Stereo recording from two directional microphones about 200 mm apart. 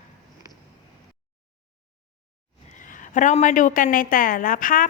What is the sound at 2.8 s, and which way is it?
A woman's voice, 40° left (ahead or behind).